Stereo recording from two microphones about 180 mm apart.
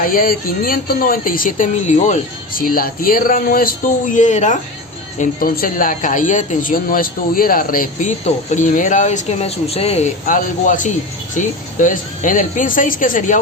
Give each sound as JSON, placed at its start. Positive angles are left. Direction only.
{"t": 0.0, "sound": "speech", "side_deg": 50}